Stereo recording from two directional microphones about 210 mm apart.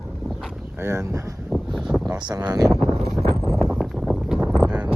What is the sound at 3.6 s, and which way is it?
Wind noise, centre (ahead or behind).